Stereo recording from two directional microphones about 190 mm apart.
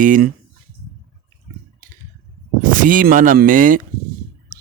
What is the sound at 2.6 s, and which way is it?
Speech, 45° right (ahead or behind).